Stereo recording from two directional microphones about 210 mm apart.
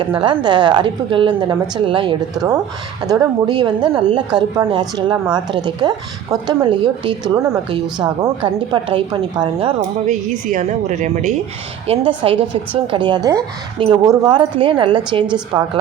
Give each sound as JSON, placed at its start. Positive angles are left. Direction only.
{"t": 0.0, "sound": "a woman's voice", "side_deg": -25}
{"t": 10.1, "sound": "a woman's voice", "side_deg": -35}